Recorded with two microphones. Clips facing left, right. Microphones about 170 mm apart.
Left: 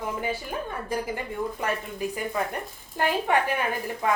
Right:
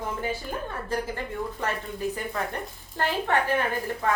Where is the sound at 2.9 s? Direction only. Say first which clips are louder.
Left 2 dB; 15° left (ahead or behind).